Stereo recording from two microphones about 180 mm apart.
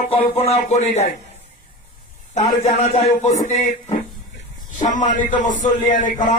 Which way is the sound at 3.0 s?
40° left (ahead or behind).